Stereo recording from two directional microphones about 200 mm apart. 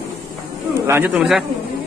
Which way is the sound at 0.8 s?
10° right (ahead or behind).